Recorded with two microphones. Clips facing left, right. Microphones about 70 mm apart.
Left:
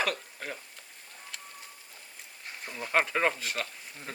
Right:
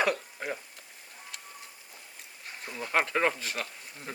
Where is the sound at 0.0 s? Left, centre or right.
Centre.